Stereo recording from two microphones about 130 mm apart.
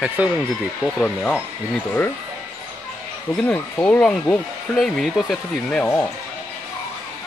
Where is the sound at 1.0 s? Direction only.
10° left (ahead or behind).